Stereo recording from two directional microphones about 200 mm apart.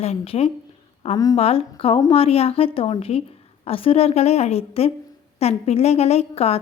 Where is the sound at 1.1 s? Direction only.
20° left (ahead or behind).